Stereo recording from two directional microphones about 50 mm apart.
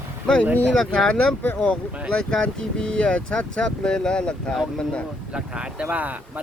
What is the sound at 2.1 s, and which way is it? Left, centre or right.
Speech, centre.